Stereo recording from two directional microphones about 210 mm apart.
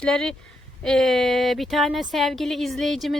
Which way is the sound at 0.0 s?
5° left (ahead or behind).